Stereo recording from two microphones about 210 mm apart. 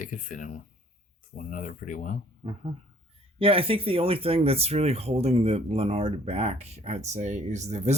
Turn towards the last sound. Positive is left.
turn(degrees=-30)  # may be behind; listen again after turning